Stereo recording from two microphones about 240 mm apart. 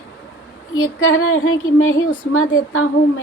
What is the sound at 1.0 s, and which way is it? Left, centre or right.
A woman's voice, left.